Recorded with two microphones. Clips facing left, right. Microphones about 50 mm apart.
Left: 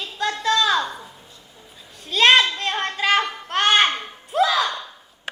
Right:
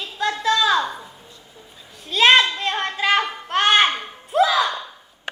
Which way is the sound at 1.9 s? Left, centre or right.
Centre.